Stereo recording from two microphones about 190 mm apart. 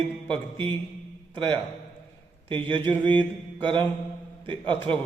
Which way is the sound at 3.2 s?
25° right (ahead or behind).